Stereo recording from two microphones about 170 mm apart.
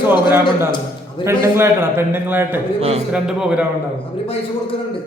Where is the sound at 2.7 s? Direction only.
35° right (ahead or behind).